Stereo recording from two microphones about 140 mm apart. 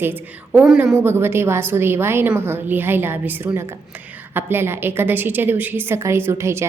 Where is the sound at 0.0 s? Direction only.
15° right (ahead or behind).